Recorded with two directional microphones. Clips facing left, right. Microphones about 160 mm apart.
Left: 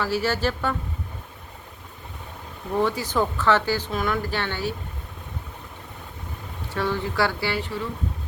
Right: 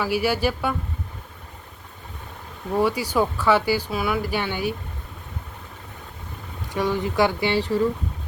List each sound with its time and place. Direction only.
0.0 s speech: 10° right (ahead or behind)
2.7 s speech: 10° right (ahead or behind)
6.7 s speech: 15° right (ahead or behind)